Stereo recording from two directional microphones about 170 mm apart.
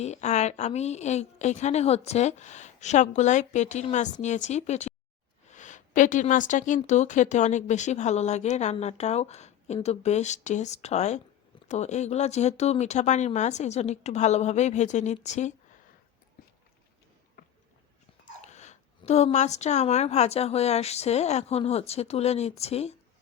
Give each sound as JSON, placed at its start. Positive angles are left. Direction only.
{"t": 0.0, "sound": "a woman's voice", "side_deg": 40}
{"t": 17.4, "sound": "a sound", "side_deg": 55}
{"t": 18.4, "sound": "a woman's voice", "side_deg": 45}